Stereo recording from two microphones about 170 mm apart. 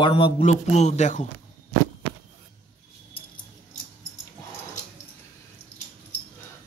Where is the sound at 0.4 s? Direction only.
40° left (ahead or behind).